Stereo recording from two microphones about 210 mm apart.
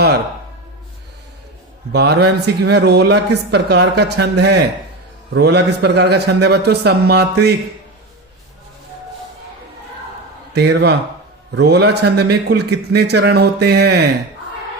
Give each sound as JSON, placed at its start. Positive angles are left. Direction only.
{"t": 1.9, "sound": "speech", "side_deg": -50}
{"t": 10.5, "sound": "speech", "side_deg": -50}